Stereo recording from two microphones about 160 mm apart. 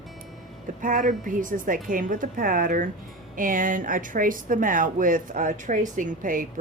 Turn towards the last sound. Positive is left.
turn(degrees=-55)  # may be behind; listen again after turning